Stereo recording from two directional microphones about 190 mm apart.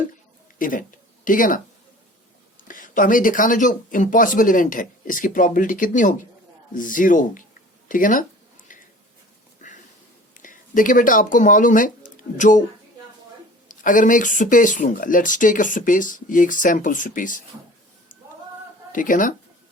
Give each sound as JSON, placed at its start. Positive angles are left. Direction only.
{"t": 0.6, "sound": "speech", "side_deg": 45}
{"t": 2.6, "sound": "speech", "side_deg": 45}
{"t": 8.6, "sound": "a sound", "side_deg": 45}
{"t": 10.3, "sound": "speech", "side_deg": 45}
{"t": 13.7, "sound": "speech", "side_deg": 45}
{"t": 18.9, "sound": "speech", "side_deg": 45}